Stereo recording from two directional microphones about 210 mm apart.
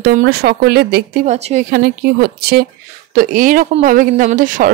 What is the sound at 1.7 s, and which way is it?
Speech, 45° right (ahead or behind).